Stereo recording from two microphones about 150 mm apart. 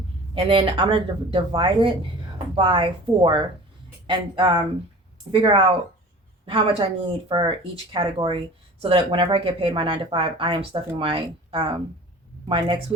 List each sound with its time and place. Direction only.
0.3 s speech: 35° right (ahead or behind)